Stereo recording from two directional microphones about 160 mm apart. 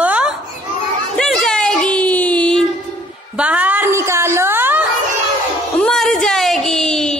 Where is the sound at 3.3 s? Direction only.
10° right (ahead or behind).